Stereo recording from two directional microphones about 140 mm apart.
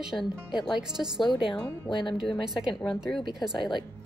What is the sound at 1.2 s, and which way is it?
Speech, 35° left (ahead or behind).